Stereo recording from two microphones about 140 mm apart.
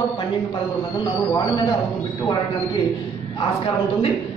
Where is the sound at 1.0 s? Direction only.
30° left (ahead or behind).